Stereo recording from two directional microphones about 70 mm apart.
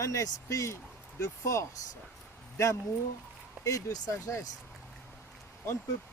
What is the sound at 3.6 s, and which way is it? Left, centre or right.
Speech, left.